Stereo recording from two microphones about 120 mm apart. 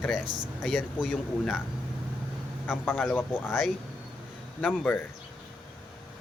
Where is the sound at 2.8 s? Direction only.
10° left (ahead or behind).